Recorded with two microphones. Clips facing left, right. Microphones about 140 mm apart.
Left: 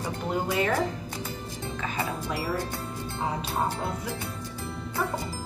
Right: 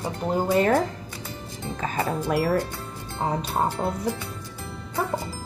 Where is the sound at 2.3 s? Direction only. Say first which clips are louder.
Right 9 dB; 60° right (ahead or behind).